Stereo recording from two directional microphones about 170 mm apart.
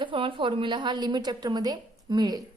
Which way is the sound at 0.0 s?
30° right (ahead or behind).